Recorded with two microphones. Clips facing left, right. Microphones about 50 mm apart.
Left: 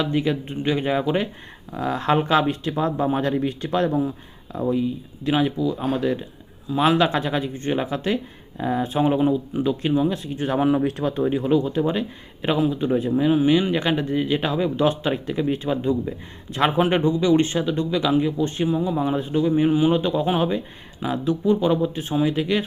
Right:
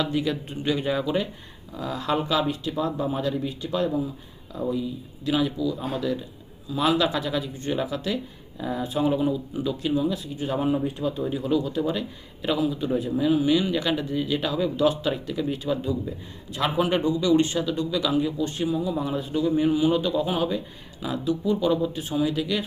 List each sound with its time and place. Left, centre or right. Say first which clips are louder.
0.0 s speech: left 3 dB; left
4.5 s a man's voice: left 5 dB; left
10.3 s speech: left 6 dB; left
11.2 s a man's voice: left 6 dB; left